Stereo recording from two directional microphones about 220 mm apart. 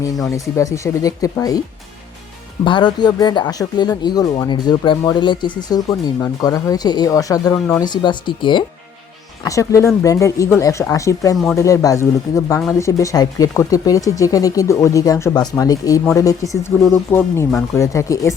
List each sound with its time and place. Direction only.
0.5 s speech: 15° left (ahead or behind)
2.6 s speech: 20° left (ahead or behind)